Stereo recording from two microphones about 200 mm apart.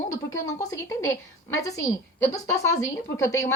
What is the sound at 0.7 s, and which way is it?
A woman's voice, 15° left (ahead or behind).